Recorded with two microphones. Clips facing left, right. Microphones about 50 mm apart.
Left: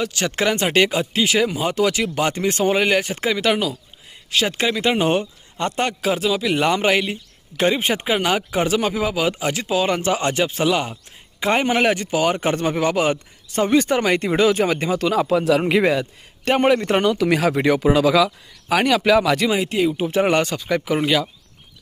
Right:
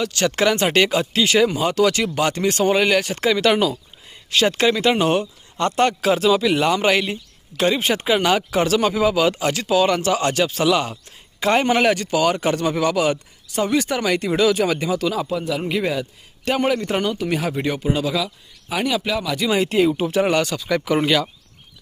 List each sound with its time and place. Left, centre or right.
0.0 s speech: centre
4.9 s speech: centre
6.6 s speech: left
6.8 s speech: centre
7.5 s a man's voice: left
15.3 s speech: left
15.9 s speech: left
17.2 s speech: left
18.7 s speech: left
19.5 s speech: centre
20.2 s a man's voice: left
20.7 s speech: centre
20.9 s speech: centre